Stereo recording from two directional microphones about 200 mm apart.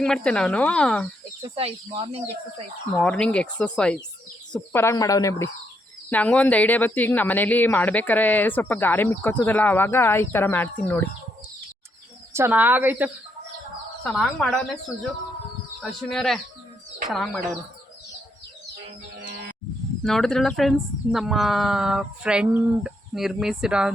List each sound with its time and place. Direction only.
0.0 s speech: 5° left (ahead or behind)
1.5 s speech: 30° right (ahead or behind)
2.9 s speech: 5° left (ahead or behind)
12.3 s speech: 10° right (ahead or behind)
14.0 s speech: centre (ahead or behind)
15.8 s speech: centre (ahead or behind)
20.1 s speech: centre (ahead or behind)